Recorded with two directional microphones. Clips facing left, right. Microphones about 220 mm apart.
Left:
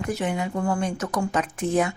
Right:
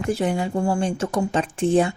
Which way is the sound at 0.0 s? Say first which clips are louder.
Right 4 dB; 30° right (ahead or behind).